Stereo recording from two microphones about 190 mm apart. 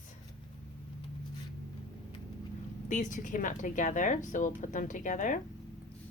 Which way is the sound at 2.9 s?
40° left (ahead or behind).